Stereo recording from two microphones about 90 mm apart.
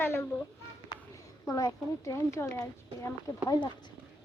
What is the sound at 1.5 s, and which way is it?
A child's voice, 40° left (ahead or behind).